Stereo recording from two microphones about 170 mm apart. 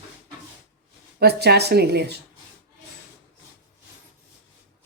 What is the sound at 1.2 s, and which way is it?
Speech, 70° right (ahead or behind).